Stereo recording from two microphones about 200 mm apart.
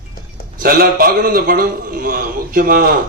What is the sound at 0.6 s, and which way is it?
A man's voice, 45° right (ahead or behind).